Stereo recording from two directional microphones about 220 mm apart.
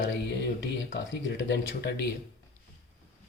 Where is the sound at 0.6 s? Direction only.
60° left (ahead or behind).